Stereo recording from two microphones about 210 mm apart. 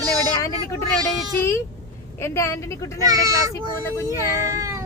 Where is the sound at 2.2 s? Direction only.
15° left (ahead or behind).